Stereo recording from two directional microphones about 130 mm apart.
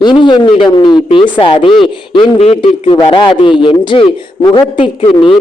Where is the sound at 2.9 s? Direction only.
35° left (ahead or behind).